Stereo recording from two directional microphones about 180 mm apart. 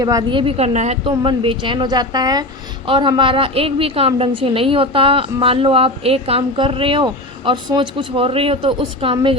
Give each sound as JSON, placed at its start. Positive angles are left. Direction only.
{"t": 0.0, "sound": "a woman's voice", "side_deg": -20}